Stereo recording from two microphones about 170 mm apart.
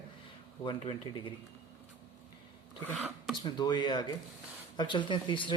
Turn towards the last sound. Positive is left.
turn(degrees=30)  # may be behind; listen again after turning